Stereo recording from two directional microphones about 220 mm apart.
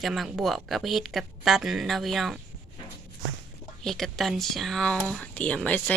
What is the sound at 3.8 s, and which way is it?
Speech, centre (ahead or behind).